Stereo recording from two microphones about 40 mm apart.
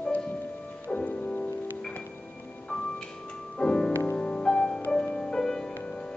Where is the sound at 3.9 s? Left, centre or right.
Left.